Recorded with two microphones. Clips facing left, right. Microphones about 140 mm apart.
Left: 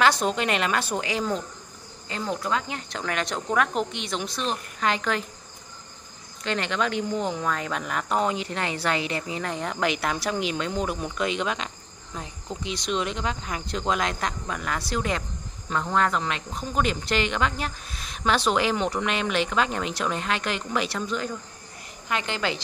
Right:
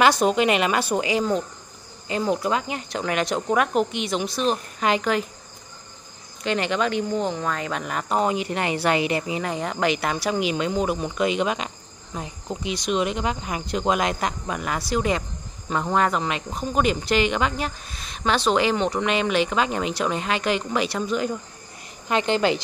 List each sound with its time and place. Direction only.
0.0 s speech: 10° right (ahead or behind)
6.4 s speech: 5° right (ahead or behind)
22.0 s a woman's voice: 25° right (ahead or behind)